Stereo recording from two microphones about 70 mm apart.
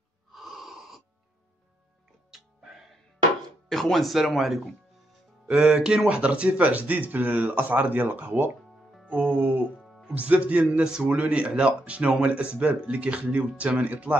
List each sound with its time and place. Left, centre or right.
0.3 s wheeze: centre
3.4 s a man's voice: centre; by 14.1 s right